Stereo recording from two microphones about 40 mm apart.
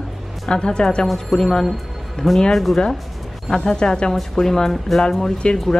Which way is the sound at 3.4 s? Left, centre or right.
Centre.